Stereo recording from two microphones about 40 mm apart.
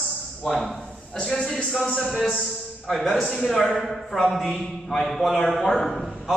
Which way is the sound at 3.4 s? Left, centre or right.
Centre.